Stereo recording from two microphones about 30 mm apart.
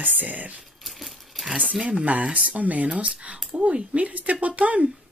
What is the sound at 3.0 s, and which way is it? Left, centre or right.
Speech, right.